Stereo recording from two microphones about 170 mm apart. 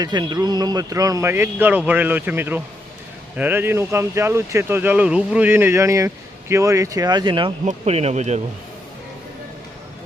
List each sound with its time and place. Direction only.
0.0 s speech: 25° right (ahead or behind)
7.6 s speech: 40° right (ahead or behind)